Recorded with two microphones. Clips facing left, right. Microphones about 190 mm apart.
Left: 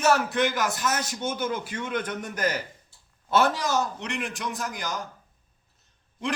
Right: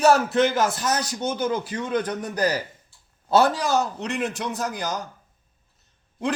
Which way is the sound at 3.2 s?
35° right (ahead or behind).